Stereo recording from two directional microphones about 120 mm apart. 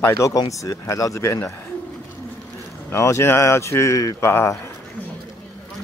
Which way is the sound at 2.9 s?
20° left (ahead or behind).